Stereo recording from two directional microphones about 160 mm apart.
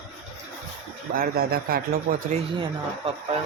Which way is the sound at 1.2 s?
70° right (ahead or behind).